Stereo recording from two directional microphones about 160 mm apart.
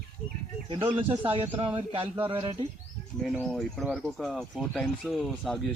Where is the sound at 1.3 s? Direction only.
40° right (ahead or behind).